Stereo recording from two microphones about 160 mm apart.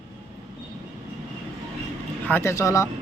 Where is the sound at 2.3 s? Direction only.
15° left (ahead or behind).